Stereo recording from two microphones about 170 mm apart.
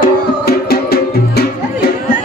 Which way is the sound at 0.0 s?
65° left (ahead or behind).